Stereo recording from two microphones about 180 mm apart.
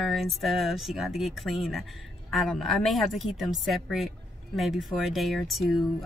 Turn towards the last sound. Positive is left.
turn(degrees=0)  # may be behind; listen again after turning